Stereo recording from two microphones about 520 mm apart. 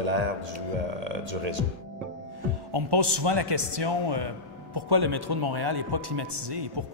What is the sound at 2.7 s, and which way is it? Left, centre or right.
Speech, right.